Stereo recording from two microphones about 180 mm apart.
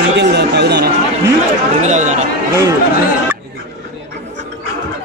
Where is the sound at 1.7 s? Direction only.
40° right (ahead or behind).